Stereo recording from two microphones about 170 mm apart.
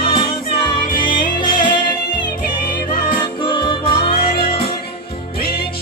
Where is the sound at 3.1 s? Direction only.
30° left (ahead or behind).